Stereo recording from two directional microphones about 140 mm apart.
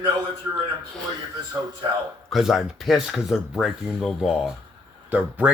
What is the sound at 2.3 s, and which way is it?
Speech, centre (ahead or behind).